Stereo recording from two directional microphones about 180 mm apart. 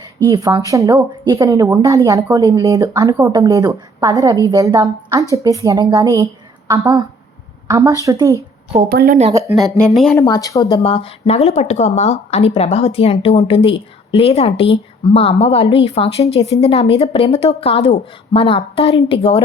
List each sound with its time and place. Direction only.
0.7 s a woman's voice: 15° right (ahead or behind)
8.9 s speech: 55° right (ahead or behind)
9.6 s speech: centre (ahead or behind)
10.2 s speech: 20° left (ahead or behind)